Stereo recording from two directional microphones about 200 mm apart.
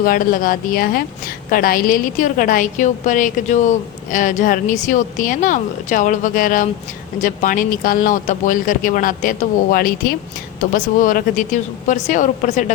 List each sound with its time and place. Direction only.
0.0 s a woman's voice: 45° left (ahead or behind)